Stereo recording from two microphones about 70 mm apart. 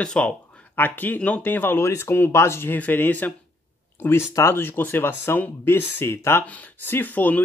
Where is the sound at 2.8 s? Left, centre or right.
Left.